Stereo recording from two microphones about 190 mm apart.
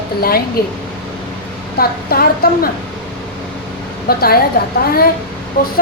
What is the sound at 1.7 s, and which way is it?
Speech, 50° left (ahead or behind).